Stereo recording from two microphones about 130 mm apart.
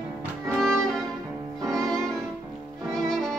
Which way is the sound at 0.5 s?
5° left (ahead or behind).